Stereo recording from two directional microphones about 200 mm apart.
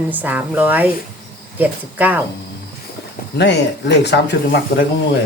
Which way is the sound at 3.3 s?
60° left (ahead or behind).